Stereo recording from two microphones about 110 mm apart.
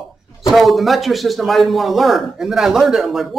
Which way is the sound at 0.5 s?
Centre (ahead or behind).